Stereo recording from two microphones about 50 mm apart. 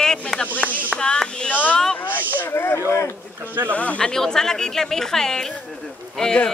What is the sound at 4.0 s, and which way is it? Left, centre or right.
Speech, centre.